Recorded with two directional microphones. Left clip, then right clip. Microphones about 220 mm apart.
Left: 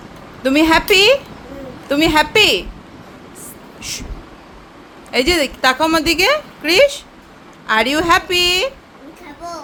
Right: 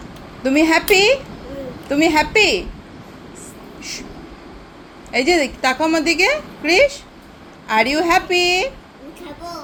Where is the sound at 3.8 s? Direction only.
20° left (ahead or behind).